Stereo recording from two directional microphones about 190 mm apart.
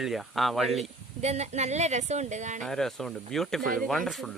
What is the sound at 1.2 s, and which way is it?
Speech, 35° right (ahead or behind).